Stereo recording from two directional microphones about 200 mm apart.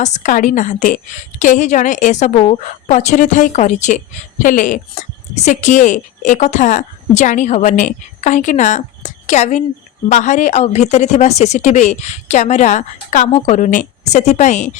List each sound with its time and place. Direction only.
0.0 s a woman's voice: 35° left (ahead or behind)